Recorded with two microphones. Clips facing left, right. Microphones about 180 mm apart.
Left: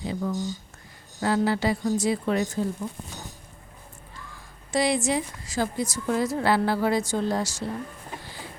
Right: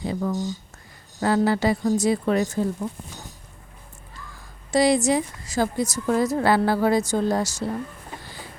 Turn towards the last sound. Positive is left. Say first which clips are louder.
# right 3 dB
turn(degrees=-45)  # may be behind; listen again after turning